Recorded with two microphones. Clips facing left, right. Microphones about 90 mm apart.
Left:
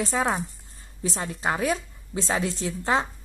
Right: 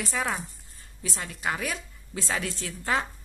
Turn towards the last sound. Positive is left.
turn(degrees=25)  # may be behind; listen again after turning